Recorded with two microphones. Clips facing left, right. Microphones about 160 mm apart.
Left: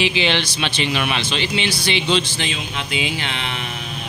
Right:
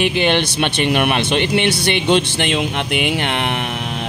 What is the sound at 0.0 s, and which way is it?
Speech, 55° right (ahead or behind).